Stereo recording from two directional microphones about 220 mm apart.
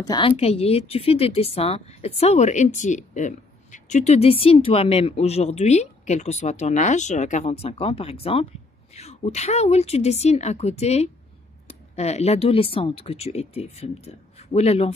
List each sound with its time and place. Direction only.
0.0 s speech: 15° left (ahead or behind)